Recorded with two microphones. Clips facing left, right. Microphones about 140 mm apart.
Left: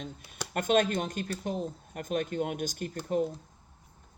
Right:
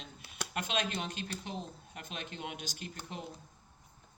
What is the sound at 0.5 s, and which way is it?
Speech, 45° left (ahead or behind).